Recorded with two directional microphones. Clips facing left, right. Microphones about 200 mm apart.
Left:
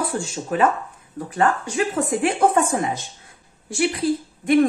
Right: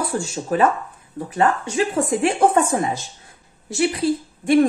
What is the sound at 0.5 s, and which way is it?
Speech, 35° right (ahead or behind).